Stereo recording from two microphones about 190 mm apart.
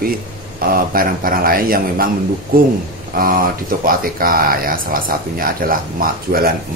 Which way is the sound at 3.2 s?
50° right (ahead or behind).